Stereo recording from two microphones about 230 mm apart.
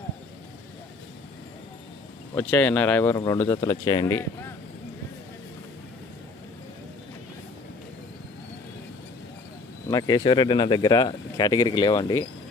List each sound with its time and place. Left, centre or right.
2.3 s speech: centre
9.9 s speech: centre